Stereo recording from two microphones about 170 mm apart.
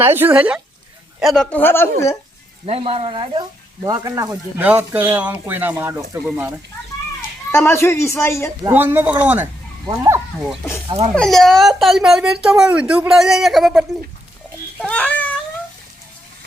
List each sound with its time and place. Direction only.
0.0 s speech: 10° right (ahead or behind); by 1.9 s 15° left (ahead or behind)
2.6 s speech: 35° right (ahead or behind); by 6.0 s 15° right (ahead or behind)
7.5 s speech: 15° left (ahead or behind)
8.7 s speech: 10° right (ahead or behind)
9.8 s speech: 20° right (ahead or behind)
10.6 s speech: 15° left (ahead or behind)
10.8 s speech: 35° right (ahead or behind)
11.1 s a child's voice: 5° left (ahead or behind)